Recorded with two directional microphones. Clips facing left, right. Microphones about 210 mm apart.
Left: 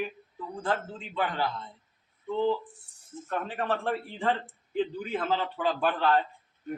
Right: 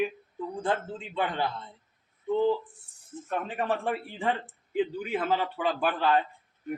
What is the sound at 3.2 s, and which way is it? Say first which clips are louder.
A man's voice: right 1 dB; 15° right (ahead or behind).